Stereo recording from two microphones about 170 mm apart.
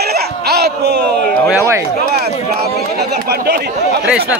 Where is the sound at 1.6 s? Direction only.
15° right (ahead or behind).